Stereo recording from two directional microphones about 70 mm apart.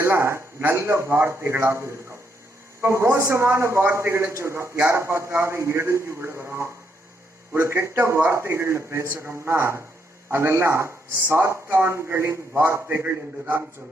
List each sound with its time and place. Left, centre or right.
0.0 s a man's voice: right
9.2 s a man's voice: right